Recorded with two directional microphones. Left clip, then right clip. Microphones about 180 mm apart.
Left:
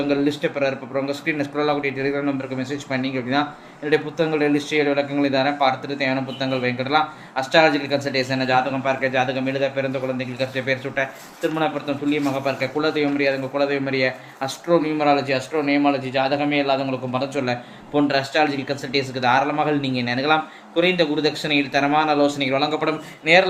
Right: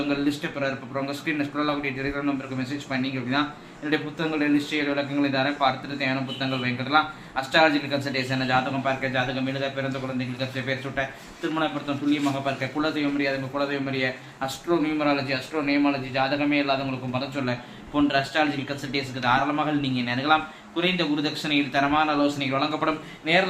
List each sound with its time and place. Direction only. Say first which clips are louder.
0.1 s a man's voice: left 6 dB; 40° left (ahead or behind)
12.1 s a man's voice: left 4 dB; 45° left (ahead or behind)